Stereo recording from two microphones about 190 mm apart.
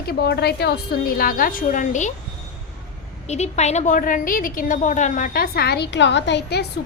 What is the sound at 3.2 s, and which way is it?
A woman's voice, 35° left (ahead or behind).